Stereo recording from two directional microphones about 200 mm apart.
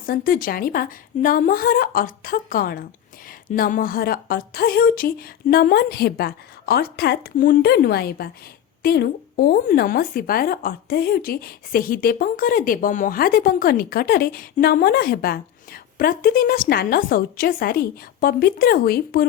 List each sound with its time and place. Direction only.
0.0 s speech: 45° left (ahead or behind)